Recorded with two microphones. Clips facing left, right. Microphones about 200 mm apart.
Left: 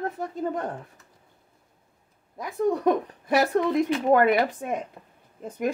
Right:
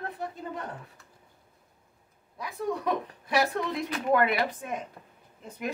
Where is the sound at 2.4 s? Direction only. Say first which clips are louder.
Left 8 dB; 45° left (ahead or behind).